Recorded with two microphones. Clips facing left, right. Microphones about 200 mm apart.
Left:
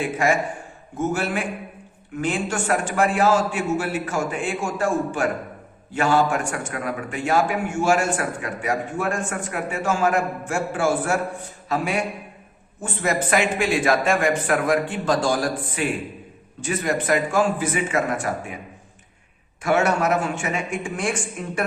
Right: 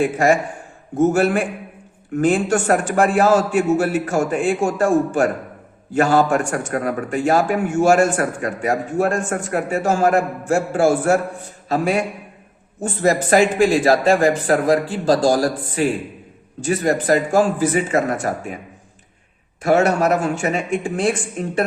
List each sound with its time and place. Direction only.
0.0 s a man's voice: 45° right (ahead or behind)
19.6 s a man's voice: 35° right (ahead or behind)